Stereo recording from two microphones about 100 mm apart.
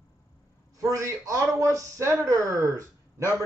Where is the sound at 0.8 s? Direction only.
35° right (ahead or behind).